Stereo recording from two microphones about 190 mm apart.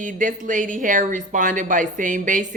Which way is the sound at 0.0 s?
45° right (ahead or behind).